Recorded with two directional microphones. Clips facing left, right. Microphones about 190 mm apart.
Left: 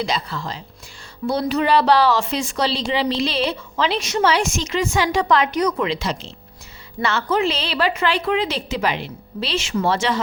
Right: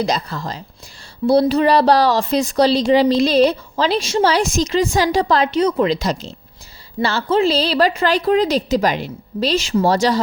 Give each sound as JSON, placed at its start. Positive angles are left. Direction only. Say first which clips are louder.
{"t": 0.0, "sound": "speech", "louder": "right 4 dB", "side_deg": -40}
{"t": 5.9, "sound": "speech", "louder": "right 5 dB", "side_deg": -40}